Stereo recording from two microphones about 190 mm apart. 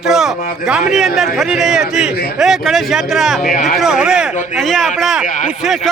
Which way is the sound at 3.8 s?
5° right (ahead or behind).